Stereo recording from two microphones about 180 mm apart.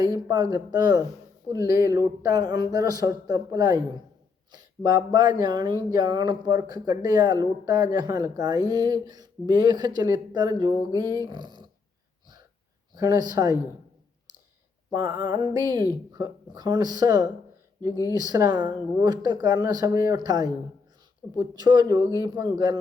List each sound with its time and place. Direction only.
0.0 s speech: 20° right (ahead or behind)
13.0 s speech: 20° right (ahead or behind)
14.9 s speech: 25° right (ahead or behind)